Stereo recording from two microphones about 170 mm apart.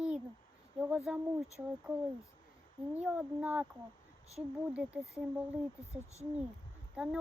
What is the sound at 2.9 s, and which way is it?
Speech, 10° right (ahead or behind).